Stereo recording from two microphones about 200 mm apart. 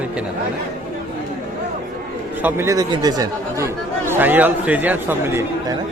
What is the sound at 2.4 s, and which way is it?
A man's voice, 15° right (ahead or behind).